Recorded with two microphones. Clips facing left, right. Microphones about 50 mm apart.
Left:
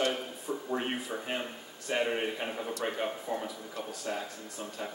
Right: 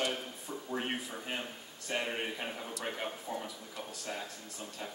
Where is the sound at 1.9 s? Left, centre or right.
Centre.